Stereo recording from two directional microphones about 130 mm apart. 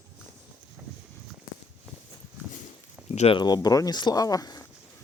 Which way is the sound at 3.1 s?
50° left (ahead or behind).